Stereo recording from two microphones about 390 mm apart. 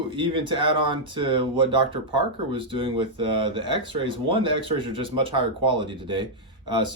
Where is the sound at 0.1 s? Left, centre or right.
Centre.